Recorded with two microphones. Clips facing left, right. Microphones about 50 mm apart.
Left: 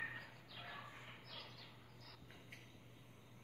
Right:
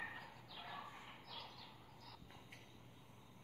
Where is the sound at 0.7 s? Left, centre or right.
Centre.